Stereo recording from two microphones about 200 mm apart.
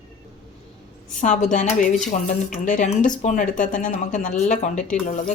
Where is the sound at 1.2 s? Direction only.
35° left (ahead or behind).